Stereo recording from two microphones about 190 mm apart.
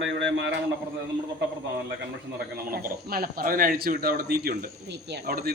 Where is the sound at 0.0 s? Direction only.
75° right (ahead or behind).